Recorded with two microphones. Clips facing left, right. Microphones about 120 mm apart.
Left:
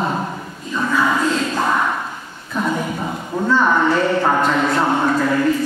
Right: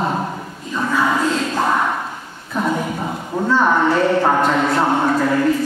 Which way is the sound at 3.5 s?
30° right (ahead or behind).